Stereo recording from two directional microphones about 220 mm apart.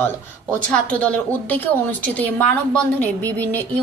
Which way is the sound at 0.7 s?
5° left (ahead or behind).